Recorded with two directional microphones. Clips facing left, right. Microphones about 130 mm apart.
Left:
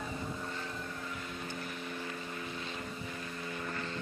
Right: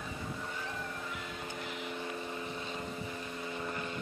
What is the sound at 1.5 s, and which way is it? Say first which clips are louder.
Vehicle: even; 15° right (ahead or behind).